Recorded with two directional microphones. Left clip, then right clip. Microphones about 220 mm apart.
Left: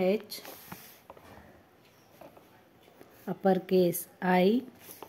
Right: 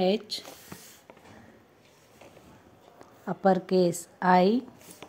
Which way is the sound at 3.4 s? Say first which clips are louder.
Right 2 dB; 25° left (ahead or behind).